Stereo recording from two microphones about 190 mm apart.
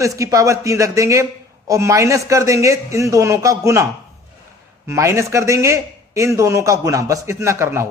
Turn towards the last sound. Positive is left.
turn(degrees=-15)  # may be behind; listen again after turning